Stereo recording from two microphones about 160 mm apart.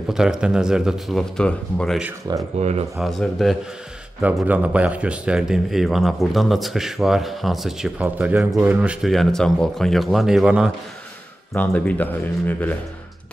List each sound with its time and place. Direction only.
0.1 s speech: 5° right (ahead or behind)
2.3 s speech: 25° right (ahead or behind)
3.0 s speech: centre (ahead or behind)
11.5 s speech: 10° left (ahead or behind)